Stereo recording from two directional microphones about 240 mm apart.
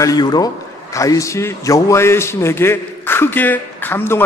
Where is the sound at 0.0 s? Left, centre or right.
Centre.